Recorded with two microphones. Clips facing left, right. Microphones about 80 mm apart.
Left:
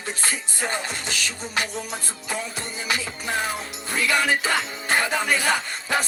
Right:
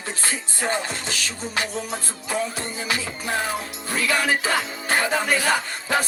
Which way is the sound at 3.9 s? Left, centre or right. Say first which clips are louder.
Even; right.